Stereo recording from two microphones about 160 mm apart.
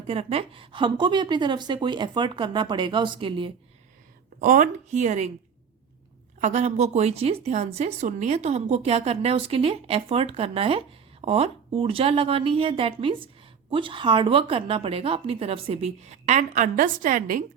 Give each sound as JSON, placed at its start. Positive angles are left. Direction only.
{"t": 0.1, "sound": "a woman's voice", "side_deg": -40}
{"t": 4.4, "sound": "a woman's voice", "side_deg": -55}
{"t": 6.4, "sound": "speech", "side_deg": -45}